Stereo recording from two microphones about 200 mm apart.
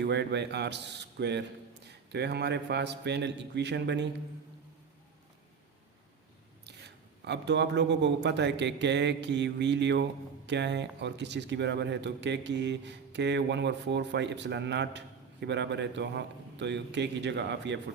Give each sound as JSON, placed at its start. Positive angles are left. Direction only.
{"t": 0.0, "sound": "a man's voice", "side_deg": -60}
{"t": 6.7, "sound": "a man's voice", "side_deg": -60}